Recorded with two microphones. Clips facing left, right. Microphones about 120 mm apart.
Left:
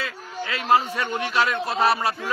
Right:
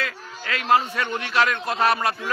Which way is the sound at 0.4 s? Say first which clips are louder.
Even; 10° left (ahead or behind).